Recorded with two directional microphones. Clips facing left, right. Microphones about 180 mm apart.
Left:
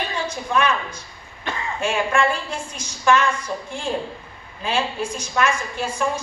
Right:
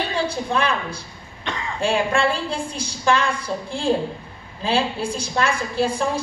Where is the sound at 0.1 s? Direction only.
30° right (ahead or behind).